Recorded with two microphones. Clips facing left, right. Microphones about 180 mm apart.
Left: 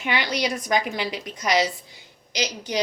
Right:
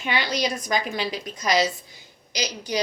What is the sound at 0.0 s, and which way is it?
A woman's voice, 15° left (ahead or behind).